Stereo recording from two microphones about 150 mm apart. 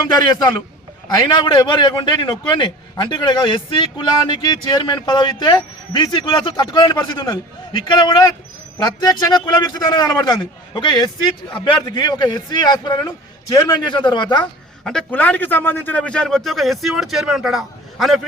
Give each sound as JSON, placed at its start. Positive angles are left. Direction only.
{"t": 1.0, "sound": "a man's voice", "side_deg": 30}
{"t": 14.8, "sound": "a man's voice", "side_deg": 5}